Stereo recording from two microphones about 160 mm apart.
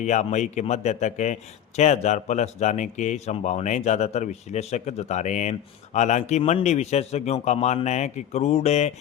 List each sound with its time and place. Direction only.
0.0 s a man's voice: 45° left (ahead or behind)